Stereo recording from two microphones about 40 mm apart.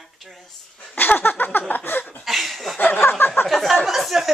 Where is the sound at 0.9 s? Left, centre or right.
Left.